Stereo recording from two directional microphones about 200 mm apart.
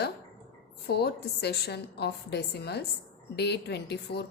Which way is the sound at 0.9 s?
55° left (ahead or behind).